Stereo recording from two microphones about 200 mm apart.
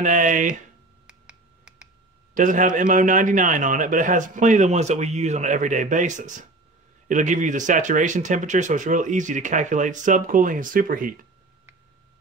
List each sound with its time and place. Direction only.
0.0 s speech: 40° right (ahead or behind)
1.0 s finger snapping: 5° right (ahead or behind)
2.3 s speech: 40° right (ahead or behind)